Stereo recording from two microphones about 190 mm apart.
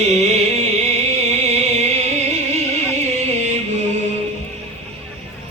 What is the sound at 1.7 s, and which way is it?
Music, 35° right (ahead or behind).